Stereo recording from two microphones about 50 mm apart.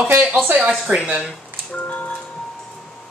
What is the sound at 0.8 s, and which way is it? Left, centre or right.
Speech, right.